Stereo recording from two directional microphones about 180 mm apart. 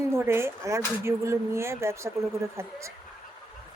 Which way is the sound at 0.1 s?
15° right (ahead or behind).